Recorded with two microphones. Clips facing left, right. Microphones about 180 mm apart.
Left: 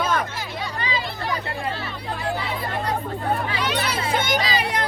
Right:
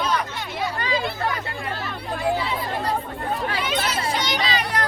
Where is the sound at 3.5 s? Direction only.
65° left (ahead or behind).